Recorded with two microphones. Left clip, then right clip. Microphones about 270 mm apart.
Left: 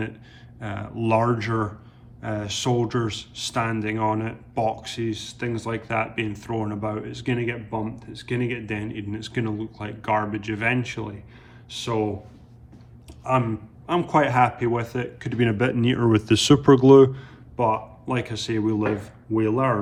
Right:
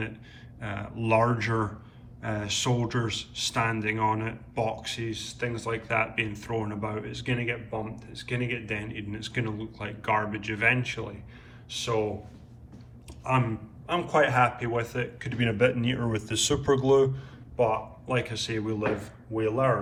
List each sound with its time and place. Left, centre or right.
0.6 s speech: centre
13.8 s a man's voice: left